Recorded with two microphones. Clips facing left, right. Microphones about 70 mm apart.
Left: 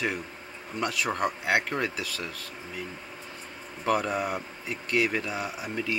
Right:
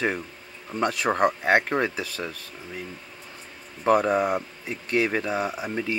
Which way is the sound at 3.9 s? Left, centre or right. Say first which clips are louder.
Right 6 dB; right.